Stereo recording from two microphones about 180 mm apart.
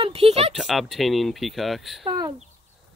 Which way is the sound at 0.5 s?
Centre (ahead or behind).